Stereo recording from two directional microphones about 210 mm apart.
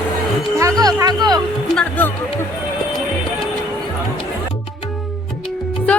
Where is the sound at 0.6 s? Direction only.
15° right (ahead or behind).